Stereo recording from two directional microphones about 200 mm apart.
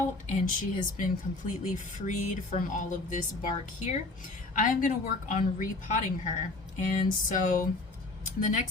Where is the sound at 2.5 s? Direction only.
40° left (ahead or behind).